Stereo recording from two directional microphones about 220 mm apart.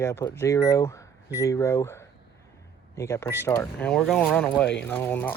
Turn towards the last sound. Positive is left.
turn(degrees=10)  # may be behind; listen again after turning